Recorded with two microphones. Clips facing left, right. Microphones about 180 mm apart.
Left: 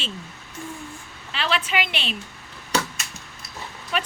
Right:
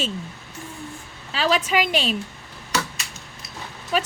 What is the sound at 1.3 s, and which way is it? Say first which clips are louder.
Speech: right 4 dB; 40° right (ahead or behind).